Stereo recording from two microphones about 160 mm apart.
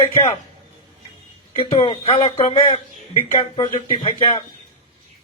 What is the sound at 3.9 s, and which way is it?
Speech, 35° left (ahead or behind).